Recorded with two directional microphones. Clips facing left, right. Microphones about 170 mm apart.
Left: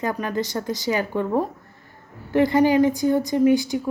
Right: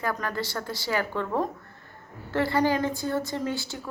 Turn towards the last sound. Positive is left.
turn(degrees=15)  # may be behind; listen again after turning